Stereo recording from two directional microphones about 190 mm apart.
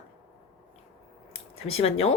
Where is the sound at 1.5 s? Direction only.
30° left (ahead or behind).